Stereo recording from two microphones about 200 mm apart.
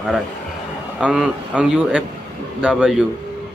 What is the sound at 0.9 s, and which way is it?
Speech, 5° right (ahead or behind).